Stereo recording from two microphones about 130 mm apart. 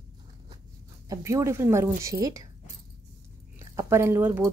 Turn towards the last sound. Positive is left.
turn(degrees=-15)  # may be behind; listen again after turning